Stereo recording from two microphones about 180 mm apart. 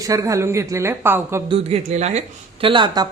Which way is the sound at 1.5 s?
35° right (ahead or behind).